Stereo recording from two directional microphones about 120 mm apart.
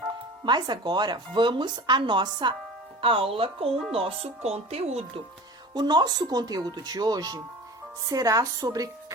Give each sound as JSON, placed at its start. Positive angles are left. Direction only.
{"t": 0.4, "sound": "speech", "side_deg": -40}
{"t": 5.7, "sound": "speech", "side_deg": -35}